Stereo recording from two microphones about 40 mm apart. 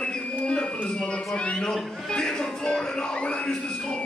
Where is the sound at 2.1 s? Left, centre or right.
Centre.